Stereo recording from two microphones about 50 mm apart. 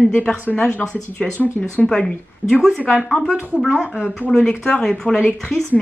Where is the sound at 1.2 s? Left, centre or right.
Centre.